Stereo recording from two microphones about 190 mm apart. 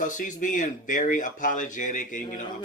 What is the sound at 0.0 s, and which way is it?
Speech, 45° left (ahead or behind).